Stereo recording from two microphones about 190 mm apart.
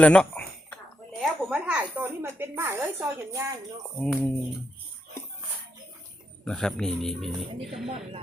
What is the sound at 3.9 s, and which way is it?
Speech, 5° left (ahead or behind).